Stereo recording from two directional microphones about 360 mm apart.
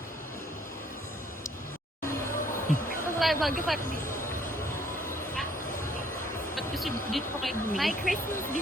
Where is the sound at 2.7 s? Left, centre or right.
Left.